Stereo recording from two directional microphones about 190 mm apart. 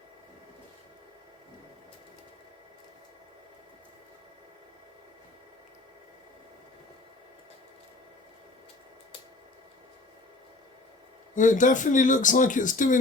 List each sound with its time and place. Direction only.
11.3 s speech: 45° left (ahead or behind)